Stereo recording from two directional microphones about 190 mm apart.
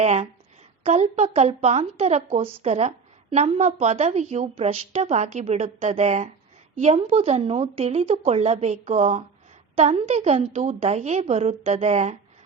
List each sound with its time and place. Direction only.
0.0 s a woman's voice: 35° right (ahead or behind)